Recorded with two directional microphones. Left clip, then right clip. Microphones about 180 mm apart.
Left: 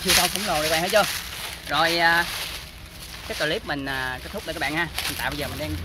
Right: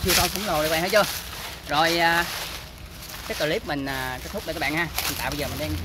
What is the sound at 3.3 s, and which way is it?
Speech, 10° right (ahead or behind).